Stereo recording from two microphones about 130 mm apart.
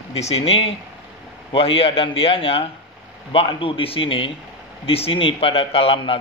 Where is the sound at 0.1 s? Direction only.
50° left (ahead or behind).